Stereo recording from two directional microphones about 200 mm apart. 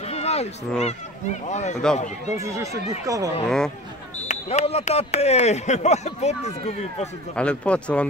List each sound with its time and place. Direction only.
0.1 s speech: 30° left (ahead or behind)
2.3 s speech: 15° right (ahead or behind)
3.4 s speech: 5° left (ahead or behind)
4.3 s speech: 35° left (ahead or behind)
7.3 s speech: 5° left (ahead or behind)